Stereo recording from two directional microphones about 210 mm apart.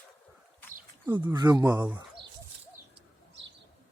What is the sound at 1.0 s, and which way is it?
Speech, 20° right (ahead or behind).